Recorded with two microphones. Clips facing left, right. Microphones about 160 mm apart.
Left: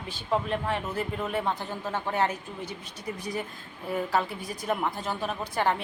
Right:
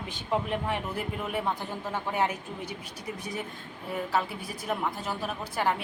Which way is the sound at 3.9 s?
5° right (ahead or behind).